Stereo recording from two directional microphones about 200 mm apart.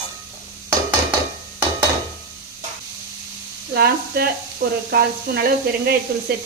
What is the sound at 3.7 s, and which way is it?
Speech, 50° right (ahead or behind).